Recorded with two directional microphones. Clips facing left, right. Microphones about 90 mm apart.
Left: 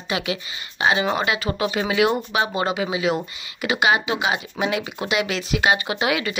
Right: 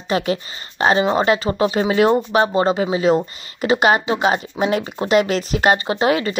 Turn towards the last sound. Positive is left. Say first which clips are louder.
# right 5 dB
turn(degrees=-35)  # may be behind; listen again after turning